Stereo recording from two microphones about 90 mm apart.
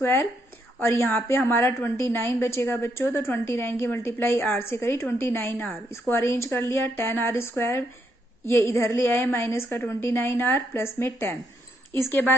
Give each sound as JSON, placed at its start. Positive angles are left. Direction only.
{"t": 0.0, "sound": "a woman's voice", "side_deg": 25}